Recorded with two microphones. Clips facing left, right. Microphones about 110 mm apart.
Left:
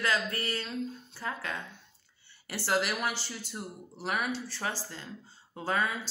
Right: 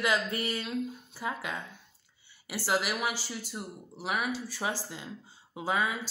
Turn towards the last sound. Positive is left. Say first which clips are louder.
# right 1 dB
turn(degrees=-10)  # may be behind; listen again after turning